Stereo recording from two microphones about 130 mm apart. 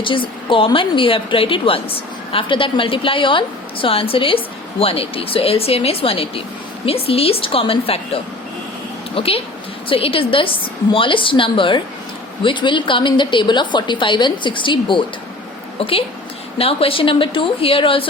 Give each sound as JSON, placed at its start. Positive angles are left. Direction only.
{"t": 0.0, "sound": "a woman's voice", "side_deg": 40}